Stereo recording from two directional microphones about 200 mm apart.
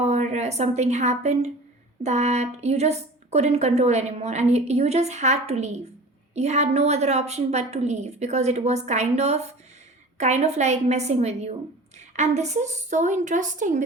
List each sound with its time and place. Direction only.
0.0 s a woman's voice: 35° right (ahead or behind)